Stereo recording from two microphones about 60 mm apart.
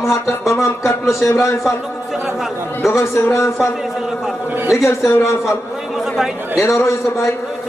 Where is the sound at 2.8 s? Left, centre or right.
Left.